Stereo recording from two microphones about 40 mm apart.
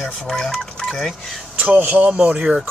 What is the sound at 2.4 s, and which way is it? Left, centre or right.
Speech, centre.